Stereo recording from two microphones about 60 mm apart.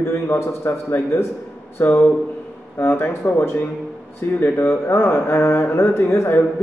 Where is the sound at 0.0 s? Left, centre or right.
Left.